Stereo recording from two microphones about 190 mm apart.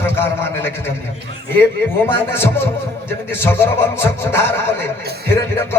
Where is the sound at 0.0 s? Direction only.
10° left (ahead or behind).